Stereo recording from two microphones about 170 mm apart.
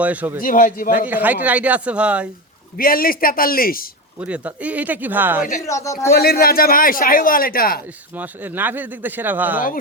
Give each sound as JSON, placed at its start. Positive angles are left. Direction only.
{"t": 0.0, "sound": "speech", "side_deg": -10}
{"t": 0.3, "sound": "a man's voice", "side_deg": 55}
{"t": 1.0, "sound": "speech", "side_deg": -10}
{"t": 2.7, "sound": "a man's voice", "side_deg": 60}
{"t": 4.2, "sound": "speech", "side_deg": -10}
{"t": 5.6, "sound": "a man's voice", "side_deg": 20}
{"t": 6.1, "sound": "a man's voice", "side_deg": 65}
{"t": 8.1, "sound": "speech", "side_deg": -10}